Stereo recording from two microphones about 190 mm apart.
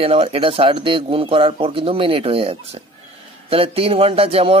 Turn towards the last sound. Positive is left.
turn(degrees=-30)  # may be behind; listen again after turning